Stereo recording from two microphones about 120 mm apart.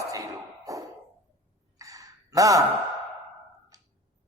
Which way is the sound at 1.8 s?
30° right (ahead or behind).